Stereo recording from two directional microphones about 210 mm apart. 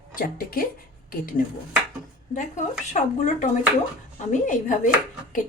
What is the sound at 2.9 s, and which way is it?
Speech, 35° left (ahead or behind).